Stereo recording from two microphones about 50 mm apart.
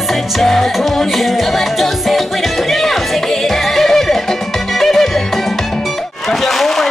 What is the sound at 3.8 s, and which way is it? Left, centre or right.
Music, centre.